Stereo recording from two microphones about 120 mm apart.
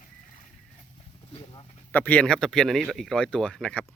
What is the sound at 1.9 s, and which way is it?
Speech, 15° left (ahead or behind).